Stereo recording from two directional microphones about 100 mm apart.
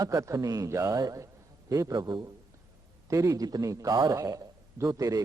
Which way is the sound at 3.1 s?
30° right (ahead or behind).